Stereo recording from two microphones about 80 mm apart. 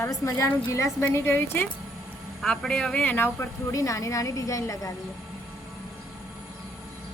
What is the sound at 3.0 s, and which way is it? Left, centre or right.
Speech, left.